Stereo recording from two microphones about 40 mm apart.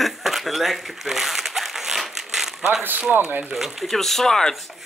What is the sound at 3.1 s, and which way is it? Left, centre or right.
Speech, right.